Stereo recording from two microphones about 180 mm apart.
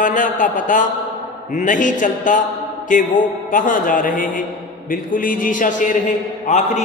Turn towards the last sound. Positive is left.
turn(degrees=45)  # may be behind; listen again after turning